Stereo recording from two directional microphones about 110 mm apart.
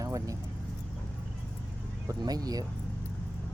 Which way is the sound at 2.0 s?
35° right (ahead or behind).